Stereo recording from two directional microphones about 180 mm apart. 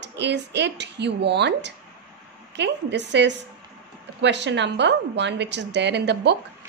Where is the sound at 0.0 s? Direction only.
75° right (ahead or behind).